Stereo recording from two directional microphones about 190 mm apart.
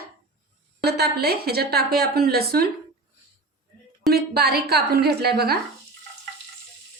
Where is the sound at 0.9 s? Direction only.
55° right (ahead or behind).